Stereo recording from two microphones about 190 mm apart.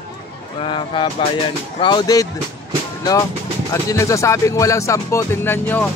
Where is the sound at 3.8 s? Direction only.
15° left (ahead or behind).